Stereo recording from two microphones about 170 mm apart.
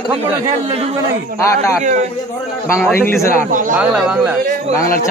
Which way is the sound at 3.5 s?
50° right (ahead or behind).